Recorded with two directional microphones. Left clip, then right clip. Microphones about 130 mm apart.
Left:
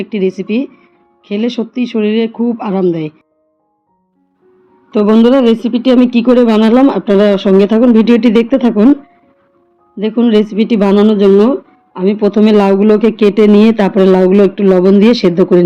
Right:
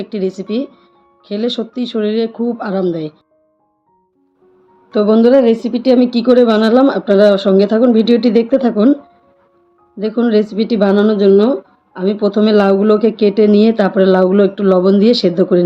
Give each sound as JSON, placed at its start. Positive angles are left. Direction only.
{"t": 0.0, "sound": "speech", "side_deg": 30}
{"t": 4.9, "sound": "speech", "side_deg": 30}
{"t": 10.0, "sound": "speech", "side_deg": 30}